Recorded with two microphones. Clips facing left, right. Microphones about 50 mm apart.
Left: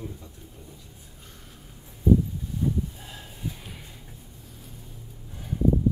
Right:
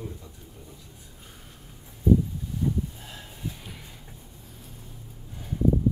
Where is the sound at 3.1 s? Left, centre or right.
Centre.